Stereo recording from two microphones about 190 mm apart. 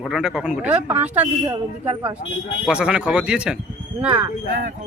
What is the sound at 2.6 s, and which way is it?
Speech, 5° right (ahead or behind).